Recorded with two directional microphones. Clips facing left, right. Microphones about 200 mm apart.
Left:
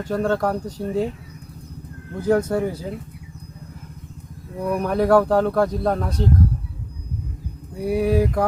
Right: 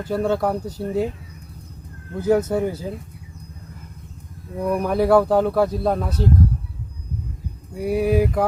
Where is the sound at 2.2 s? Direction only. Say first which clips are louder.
Right 1 dB; 5° right (ahead or behind).